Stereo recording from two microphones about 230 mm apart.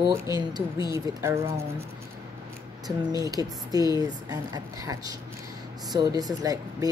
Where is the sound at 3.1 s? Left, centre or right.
Centre.